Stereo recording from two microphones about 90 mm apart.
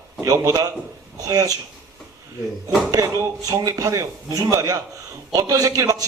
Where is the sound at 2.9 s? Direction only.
40° right (ahead or behind).